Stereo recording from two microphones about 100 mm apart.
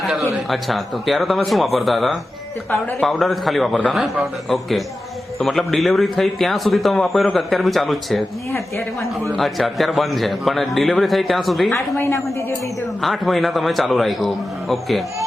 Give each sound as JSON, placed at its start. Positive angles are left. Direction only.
{"t": 0.3, "sound": "speech", "side_deg": 0}
{"t": 9.4, "sound": "speech", "side_deg": 0}
{"t": 11.7, "sound": "a woman's voice", "side_deg": 25}
{"t": 13.0, "sound": "speech", "side_deg": 0}